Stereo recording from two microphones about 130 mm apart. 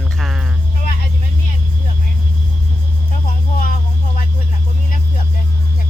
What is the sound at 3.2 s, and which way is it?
Music, 90° left.